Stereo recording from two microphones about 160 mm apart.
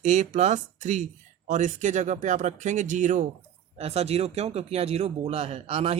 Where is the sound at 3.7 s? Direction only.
40° right (ahead or behind).